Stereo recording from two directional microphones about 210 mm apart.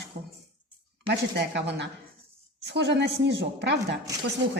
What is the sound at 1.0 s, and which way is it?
A woman's voice, 50° right (ahead or behind).